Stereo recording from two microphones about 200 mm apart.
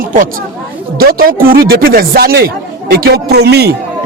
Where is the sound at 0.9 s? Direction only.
45° right (ahead or behind).